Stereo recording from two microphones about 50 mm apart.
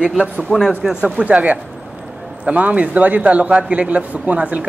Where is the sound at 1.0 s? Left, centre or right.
Right.